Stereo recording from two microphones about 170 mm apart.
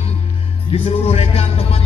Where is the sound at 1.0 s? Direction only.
35° left (ahead or behind).